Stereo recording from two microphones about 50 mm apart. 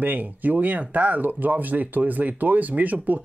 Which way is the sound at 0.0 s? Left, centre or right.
Right.